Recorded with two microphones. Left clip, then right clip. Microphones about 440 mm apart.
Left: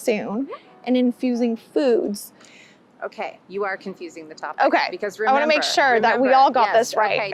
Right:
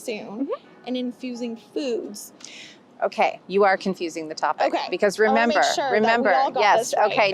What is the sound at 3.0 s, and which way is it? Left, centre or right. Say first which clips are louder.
A woman's voice: right 8 dB; right.